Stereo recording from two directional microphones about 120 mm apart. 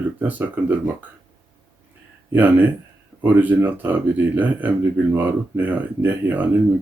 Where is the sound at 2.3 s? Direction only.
15° right (ahead or behind).